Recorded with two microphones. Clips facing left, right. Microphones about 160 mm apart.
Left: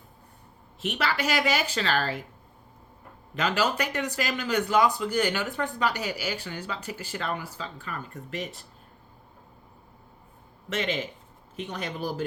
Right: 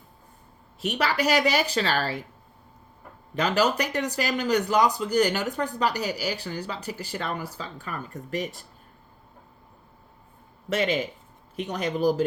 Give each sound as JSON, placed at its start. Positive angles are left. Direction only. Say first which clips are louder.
{"t": 0.8, "sound": "speech", "louder": "right 3 dB", "side_deg": -40}
{"t": 3.3, "sound": "speech", "louder": "right 3 dB", "side_deg": -40}
{"t": 10.7, "sound": "speech", "louder": "right 4 dB", "side_deg": -40}